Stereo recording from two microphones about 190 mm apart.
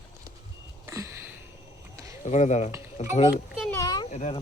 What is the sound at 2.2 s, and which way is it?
Speech, 40° left (ahead or behind).